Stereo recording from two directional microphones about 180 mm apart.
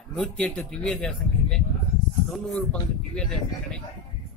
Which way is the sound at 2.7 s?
5° left (ahead or behind).